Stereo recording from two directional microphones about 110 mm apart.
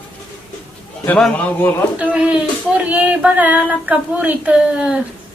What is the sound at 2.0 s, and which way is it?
Female singing, 10° right (ahead or behind).